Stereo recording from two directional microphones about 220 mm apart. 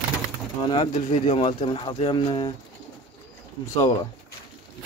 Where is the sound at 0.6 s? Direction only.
20° left (ahead or behind).